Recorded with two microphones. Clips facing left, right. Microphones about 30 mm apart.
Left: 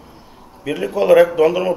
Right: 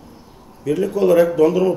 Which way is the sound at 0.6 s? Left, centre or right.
Left.